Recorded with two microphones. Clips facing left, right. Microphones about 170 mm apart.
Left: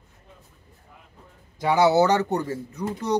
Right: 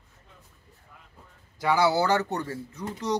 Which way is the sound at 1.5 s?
20° left (ahead or behind).